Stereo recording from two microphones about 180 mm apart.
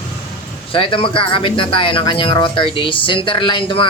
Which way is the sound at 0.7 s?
30° left (ahead or behind).